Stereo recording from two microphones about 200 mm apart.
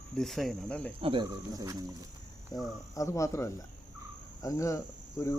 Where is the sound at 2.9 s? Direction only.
15° left (ahead or behind).